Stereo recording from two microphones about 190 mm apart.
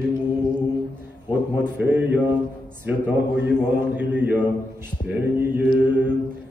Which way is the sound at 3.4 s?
10° right (ahead or behind).